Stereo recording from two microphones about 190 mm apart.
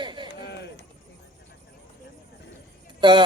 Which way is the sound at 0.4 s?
65° left (ahead or behind).